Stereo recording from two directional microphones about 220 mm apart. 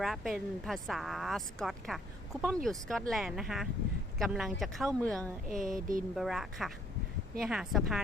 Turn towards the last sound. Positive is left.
turn(degrees=0)  # may be behind; listen again after turning